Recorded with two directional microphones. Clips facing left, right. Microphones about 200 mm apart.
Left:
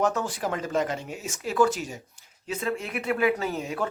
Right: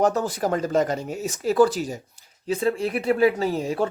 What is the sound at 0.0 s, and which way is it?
Speech, 35° right (ahead or behind).